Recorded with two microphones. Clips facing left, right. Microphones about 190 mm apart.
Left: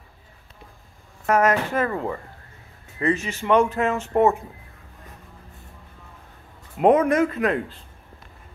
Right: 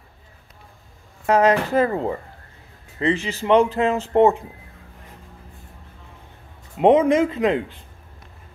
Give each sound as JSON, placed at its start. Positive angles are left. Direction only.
{"t": 1.3, "sound": "speech", "side_deg": -30}
{"t": 6.8, "sound": "speech", "side_deg": -25}